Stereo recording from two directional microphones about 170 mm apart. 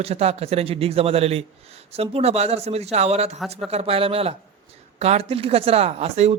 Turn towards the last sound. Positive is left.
turn(degrees=-40)  # may be behind; listen again after turning